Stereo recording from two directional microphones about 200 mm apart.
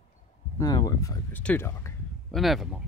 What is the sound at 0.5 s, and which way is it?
Speech, 20° left (ahead or behind).